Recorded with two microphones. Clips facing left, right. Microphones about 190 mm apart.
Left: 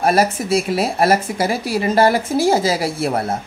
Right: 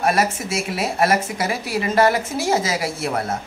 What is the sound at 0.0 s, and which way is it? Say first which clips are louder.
A man's voice: left 4 dB; 35° left (ahead or behind).